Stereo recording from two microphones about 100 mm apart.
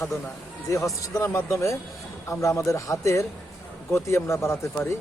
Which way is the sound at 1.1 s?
25° left (ahead or behind).